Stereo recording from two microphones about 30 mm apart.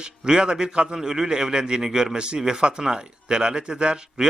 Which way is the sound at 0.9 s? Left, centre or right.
Centre.